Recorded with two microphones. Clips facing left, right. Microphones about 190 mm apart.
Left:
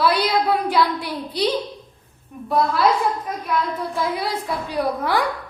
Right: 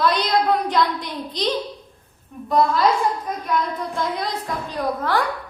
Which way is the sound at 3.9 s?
5° left (ahead or behind).